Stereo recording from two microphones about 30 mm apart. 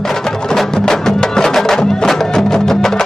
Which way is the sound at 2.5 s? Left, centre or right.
Centre.